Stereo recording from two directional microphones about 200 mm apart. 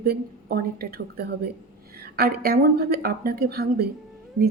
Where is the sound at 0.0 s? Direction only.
50° right (ahead or behind).